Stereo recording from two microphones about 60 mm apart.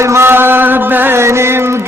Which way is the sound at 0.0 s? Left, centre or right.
Right.